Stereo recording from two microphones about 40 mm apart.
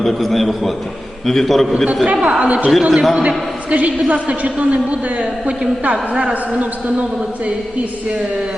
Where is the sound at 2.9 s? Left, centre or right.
Centre.